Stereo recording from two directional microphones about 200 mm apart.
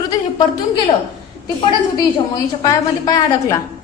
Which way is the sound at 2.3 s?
20° left (ahead or behind).